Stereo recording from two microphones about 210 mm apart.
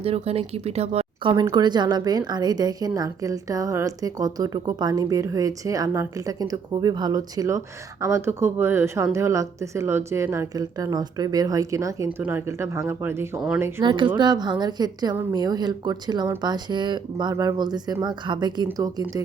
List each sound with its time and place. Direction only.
0.0 s a woman's voice: 30° right (ahead or behind)